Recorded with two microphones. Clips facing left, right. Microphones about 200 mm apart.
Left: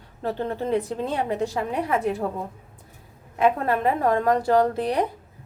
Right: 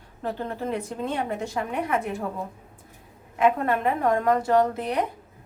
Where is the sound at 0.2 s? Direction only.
30° left (ahead or behind).